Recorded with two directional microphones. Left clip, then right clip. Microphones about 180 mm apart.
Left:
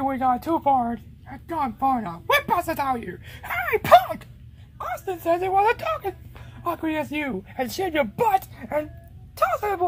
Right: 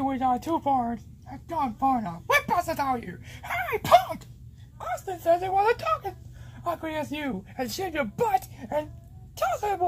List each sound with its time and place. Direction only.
0.0 s a child's voice: 25° left (ahead or behind); by 4.2 s 45° left (ahead or behind)
4.7 s a child's voice: 25° left (ahead or behind)